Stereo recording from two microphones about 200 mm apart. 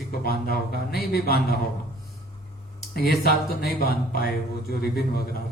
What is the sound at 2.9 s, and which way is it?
A man's voice, 50° left (ahead or behind).